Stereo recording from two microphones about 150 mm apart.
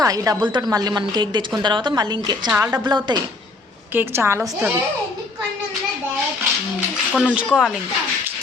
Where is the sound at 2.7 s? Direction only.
30° right (ahead or behind).